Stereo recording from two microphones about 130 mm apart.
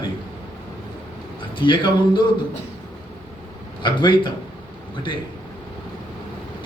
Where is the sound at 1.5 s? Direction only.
40° left (ahead or behind).